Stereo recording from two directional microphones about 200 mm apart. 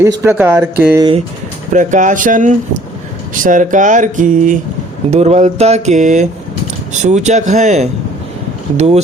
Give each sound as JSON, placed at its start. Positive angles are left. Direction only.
{"t": 0.2, "sound": "speech", "side_deg": -10}
{"t": 0.9, "sound": "speech", "side_deg": -25}
{"t": 1.7, "sound": "speech", "side_deg": -40}